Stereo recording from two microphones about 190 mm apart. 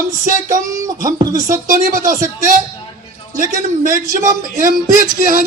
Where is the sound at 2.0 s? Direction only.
15° right (ahead or behind).